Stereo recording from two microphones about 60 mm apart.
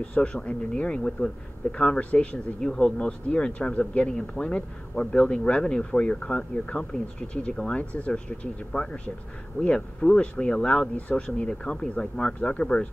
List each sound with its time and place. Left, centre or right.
0.0 s speech: centre